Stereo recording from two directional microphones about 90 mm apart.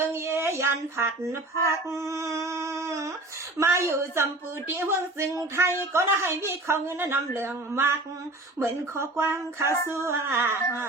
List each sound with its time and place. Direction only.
0.1 s a woman's voice: 30° right (ahead or behind)
9.6 s music: 30° left (ahead or behind)
9.9 s a woman's voice: 30° right (ahead or behind)